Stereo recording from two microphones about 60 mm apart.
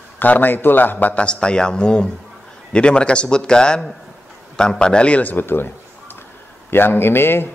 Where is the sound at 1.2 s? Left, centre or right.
Centre; by 5.7 s left.